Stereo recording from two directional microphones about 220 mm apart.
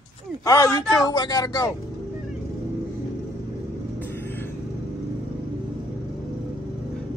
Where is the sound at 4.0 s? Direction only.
10° left (ahead or behind).